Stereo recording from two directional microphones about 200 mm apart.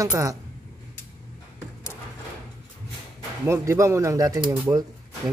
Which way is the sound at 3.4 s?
15° right (ahead or behind).